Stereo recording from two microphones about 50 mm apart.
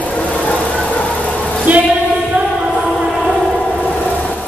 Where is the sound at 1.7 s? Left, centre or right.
Right.